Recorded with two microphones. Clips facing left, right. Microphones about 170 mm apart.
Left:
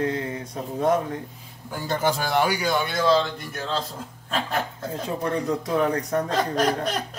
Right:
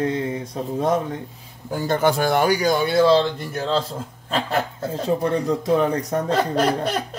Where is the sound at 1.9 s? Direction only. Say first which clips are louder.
Right 5 dB; 55° right (ahead or behind); by 3.7 s 30° right (ahead or behind).